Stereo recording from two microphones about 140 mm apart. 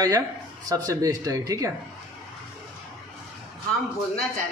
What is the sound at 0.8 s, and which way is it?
Speech, 25° right (ahead or behind).